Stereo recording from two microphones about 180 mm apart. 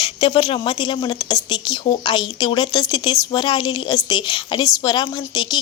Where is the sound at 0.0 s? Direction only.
30° left (ahead or behind).